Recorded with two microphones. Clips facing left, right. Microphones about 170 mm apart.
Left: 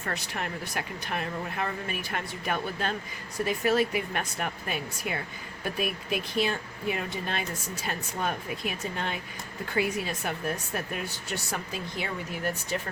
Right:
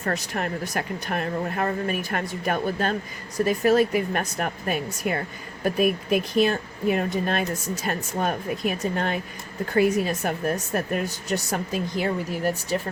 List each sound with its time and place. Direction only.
0.0 s speech: 40° right (ahead or behind)